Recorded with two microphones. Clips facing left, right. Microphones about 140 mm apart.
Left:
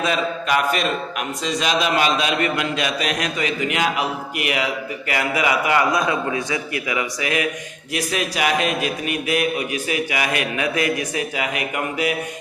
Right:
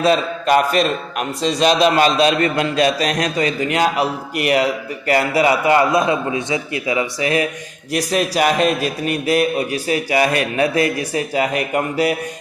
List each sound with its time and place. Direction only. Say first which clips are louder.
0.0 s a man's voice: right 6 dB; 35° right (ahead or behind)